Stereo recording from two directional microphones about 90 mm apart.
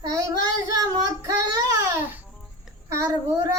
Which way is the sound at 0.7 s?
40° right (ahead or behind).